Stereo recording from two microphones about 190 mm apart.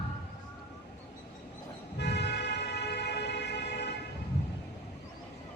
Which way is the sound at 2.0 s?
60° left (ahead or behind).